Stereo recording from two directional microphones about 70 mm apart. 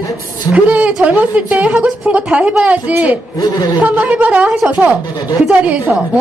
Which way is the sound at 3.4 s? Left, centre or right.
Left.